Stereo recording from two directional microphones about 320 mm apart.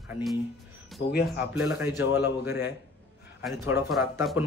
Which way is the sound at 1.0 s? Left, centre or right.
Left.